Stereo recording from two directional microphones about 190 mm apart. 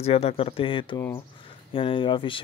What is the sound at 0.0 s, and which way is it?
Speech, 30° left (ahead or behind).